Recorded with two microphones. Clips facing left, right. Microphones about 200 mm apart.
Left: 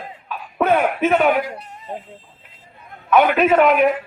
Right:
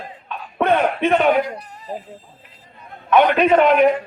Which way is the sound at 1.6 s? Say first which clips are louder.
Right 1 dB; 25° left (ahead or behind).